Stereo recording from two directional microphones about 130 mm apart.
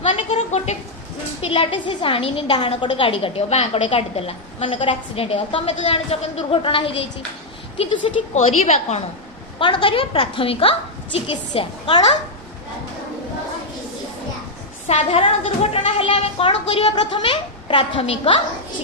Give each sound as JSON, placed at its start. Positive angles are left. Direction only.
{"t": 0.0, "sound": "a sound", "side_deg": 45}
{"t": 1.4, "sound": "a woman's voice", "side_deg": 45}
{"t": 9.6, "sound": "a woman's voice", "side_deg": 40}
{"t": 14.8, "sound": "a woman's voice", "side_deg": 50}